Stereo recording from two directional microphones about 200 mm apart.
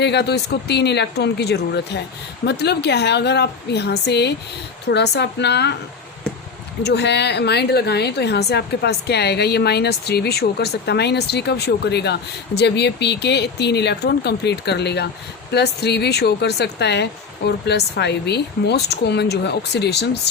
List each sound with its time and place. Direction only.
0.0 s a woman's voice: 55° left (ahead or behind)
6.8 s a woman's voice: 55° left (ahead or behind)